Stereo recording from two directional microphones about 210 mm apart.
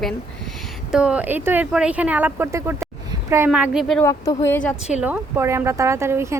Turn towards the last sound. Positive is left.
turn(degrees=-10)  # may be behind; listen again after turning